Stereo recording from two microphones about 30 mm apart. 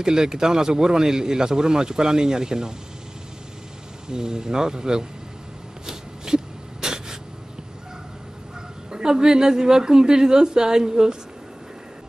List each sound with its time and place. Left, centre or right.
0.0 s speech: right
4.1 s speech: right
5.9 s a sound: right
8.9 s speech: right